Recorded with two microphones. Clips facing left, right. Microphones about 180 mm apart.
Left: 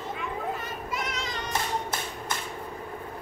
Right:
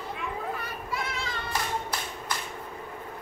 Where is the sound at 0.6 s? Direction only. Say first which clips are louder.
Left 1 dB; 20° left (ahead or behind).